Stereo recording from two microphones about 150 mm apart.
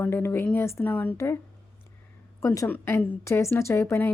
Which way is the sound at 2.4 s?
20° left (ahead or behind).